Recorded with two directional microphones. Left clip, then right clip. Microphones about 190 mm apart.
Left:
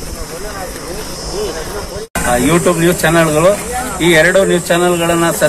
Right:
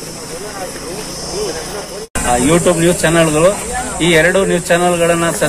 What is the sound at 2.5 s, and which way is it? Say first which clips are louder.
Speech: right 2 dB; centre (ahead or behind).